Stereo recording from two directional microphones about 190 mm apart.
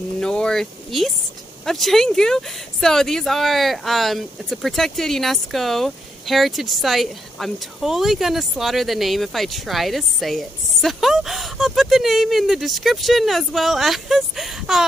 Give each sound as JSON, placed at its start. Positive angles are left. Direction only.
{"t": 0.2, "sound": "a woman's voice", "side_deg": 5}